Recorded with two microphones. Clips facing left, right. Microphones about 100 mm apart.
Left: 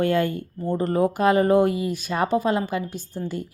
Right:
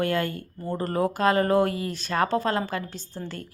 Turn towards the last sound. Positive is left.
turn(degrees=15)  # may be behind; listen again after turning